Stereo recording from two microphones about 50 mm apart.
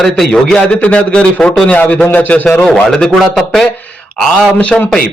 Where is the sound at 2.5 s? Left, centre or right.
Centre.